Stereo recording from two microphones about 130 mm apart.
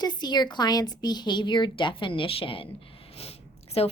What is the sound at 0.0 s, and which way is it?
A woman's voice, 35° left (ahead or behind).